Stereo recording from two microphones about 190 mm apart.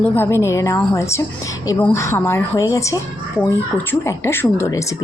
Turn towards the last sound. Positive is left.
turn(degrees=15)  # may be behind; listen again after turning